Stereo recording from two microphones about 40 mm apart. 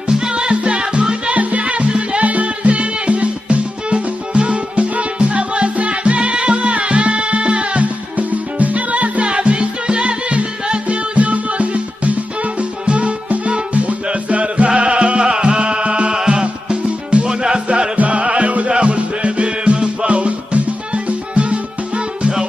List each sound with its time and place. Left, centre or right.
0.1 s music: right
1.3 s music: right
17.9 s music: right